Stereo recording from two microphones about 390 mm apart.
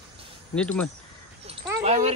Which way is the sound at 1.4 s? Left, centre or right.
Centre.